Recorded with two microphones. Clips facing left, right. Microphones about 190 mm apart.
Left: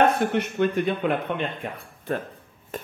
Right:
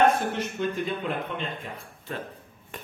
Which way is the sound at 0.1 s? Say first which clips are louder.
Left 4 dB; 65° left (ahead or behind).